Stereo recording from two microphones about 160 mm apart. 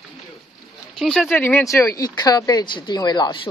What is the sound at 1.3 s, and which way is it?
Speech, 15° left (ahead or behind).